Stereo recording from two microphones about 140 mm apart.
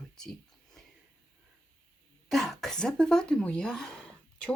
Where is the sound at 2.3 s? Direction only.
Centre (ahead or behind).